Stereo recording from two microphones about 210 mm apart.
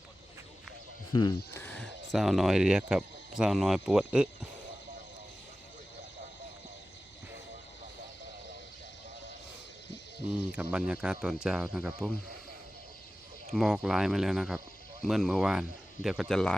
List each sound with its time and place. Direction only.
1.1 s speech: 20° left (ahead or behind)
1.5 s speech: 10° left (ahead or behind)
10.5 s speech: 5° right (ahead or behind)
13.5 s speech: centre (ahead or behind)